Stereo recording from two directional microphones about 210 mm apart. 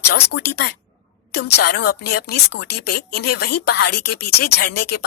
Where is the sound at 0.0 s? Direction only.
50° left (ahead or behind).